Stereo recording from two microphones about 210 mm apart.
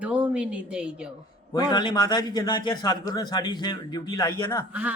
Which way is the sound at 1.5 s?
20° left (ahead or behind).